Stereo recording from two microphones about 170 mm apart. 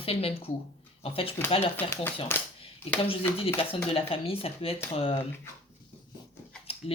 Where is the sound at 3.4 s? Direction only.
30° left (ahead or behind).